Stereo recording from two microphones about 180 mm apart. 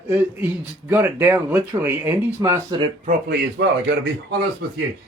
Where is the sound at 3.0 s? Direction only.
65° right (ahead or behind).